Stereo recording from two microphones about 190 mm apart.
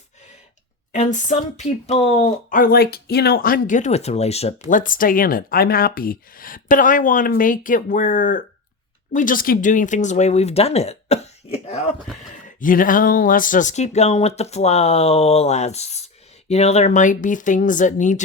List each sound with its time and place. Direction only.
0.9 s speech: 40° left (ahead or behind)
12.3 s speech: 45° left (ahead or behind)